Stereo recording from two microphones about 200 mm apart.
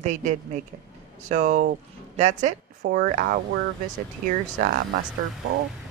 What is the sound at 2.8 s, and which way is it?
Speech, 45° right (ahead or behind).